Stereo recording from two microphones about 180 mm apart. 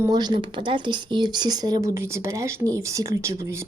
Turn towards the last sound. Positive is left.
turn(degrees=-15)  # may be behind; listen again after turning